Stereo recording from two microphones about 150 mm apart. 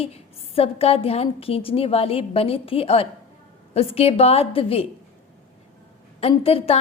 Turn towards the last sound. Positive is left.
turn(degrees=40)  # may be behind; listen again after turning